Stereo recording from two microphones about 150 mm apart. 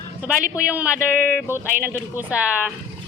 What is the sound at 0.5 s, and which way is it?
Speech, 10° right (ahead or behind).